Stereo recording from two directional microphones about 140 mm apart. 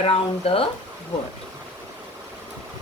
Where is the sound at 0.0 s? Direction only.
40° left (ahead or behind).